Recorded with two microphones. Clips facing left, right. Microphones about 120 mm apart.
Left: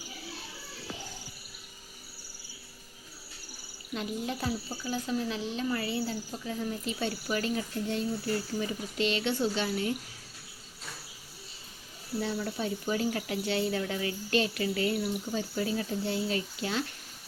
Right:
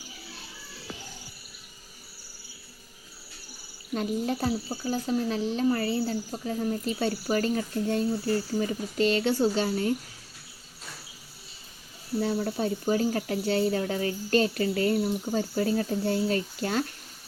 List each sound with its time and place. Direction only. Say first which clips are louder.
3.9 s speech: right 6 dB; 40° right (ahead or behind)
12.2 s speech: right 5 dB; 40° right (ahead or behind)